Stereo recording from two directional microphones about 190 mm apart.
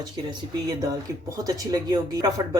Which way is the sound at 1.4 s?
20° right (ahead or behind).